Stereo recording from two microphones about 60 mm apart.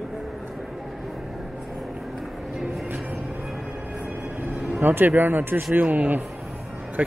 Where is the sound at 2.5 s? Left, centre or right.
Centre.